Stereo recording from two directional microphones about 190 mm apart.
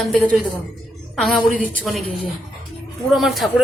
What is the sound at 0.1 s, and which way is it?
A woman's voice, centre (ahead or behind).